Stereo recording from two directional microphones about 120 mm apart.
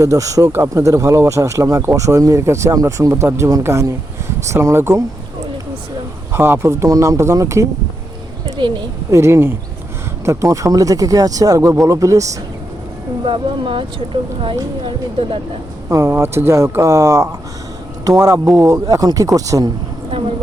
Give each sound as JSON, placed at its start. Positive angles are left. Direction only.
{"t": 0.0, "sound": "speech", "side_deg": -30}
{"t": 6.3, "sound": "speech", "side_deg": -20}
{"t": 8.4, "sound": "a sound", "side_deg": -40}
{"t": 9.0, "sound": "speech", "side_deg": -25}
{"t": 13.2, "sound": "speech", "side_deg": -45}
{"t": 15.9, "sound": "speech", "side_deg": -25}